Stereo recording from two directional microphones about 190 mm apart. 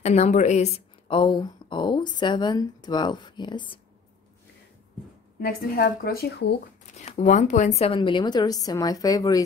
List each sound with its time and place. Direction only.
0.0 s speech: 35° left (ahead or behind)
5.4 s a woman's voice: 50° left (ahead or behind)
6.9 s speech: 35° left (ahead or behind); by 9.4 s 20° left (ahead or behind)